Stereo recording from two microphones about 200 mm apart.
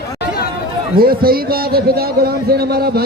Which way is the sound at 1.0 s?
50° right (ahead or behind).